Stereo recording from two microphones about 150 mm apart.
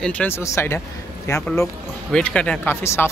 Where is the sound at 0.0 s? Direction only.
10° left (ahead or behind).